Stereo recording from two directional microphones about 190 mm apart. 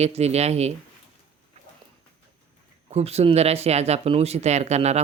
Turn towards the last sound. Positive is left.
turn(degrees=-35)  # may be behind; listen again after turning